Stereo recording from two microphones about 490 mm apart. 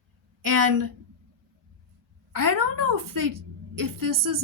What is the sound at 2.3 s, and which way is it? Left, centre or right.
A woman's voice, right.